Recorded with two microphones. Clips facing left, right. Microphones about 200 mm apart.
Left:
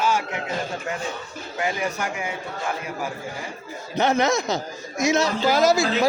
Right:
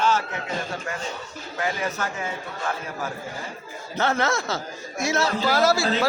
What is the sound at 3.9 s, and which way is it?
A man's voice, 15° left (ahead or behind).